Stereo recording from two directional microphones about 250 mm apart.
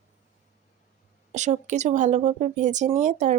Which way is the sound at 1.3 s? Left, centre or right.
Right.